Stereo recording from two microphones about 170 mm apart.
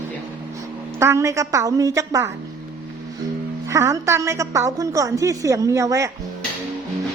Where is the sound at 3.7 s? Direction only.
20° right (ahead or behind).